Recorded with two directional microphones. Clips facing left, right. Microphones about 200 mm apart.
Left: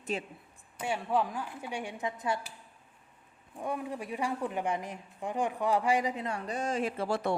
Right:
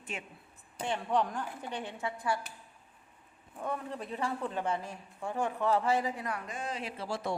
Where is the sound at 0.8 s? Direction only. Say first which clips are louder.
Left 1 dB; 10° left (ahead or behind).